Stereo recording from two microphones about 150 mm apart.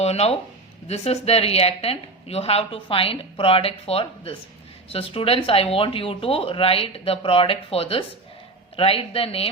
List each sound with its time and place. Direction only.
0.0 s a woman's voice: 45° left (ahead or behind)